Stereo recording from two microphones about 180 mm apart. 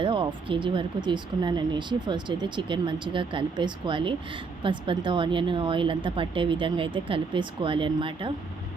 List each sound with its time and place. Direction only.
0.0 s speech: 30° right (ahead or behind)